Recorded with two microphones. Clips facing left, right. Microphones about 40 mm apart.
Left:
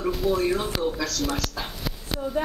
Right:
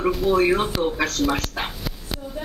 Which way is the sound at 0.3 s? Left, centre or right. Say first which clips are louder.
Right 5 dB; right.